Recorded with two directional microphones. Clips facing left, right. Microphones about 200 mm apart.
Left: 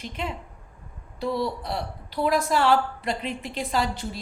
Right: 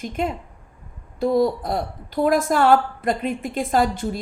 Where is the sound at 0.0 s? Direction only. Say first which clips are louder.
Right 7 dB; 45° right (ahead or behind).